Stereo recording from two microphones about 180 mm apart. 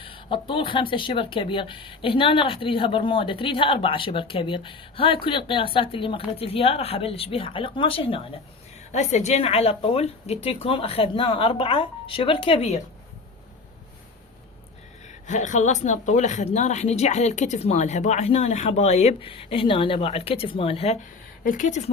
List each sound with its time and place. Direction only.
0.0 s speech: 30° left (ahead or behind)
15.0 s speech: 40° left (ahead or behind)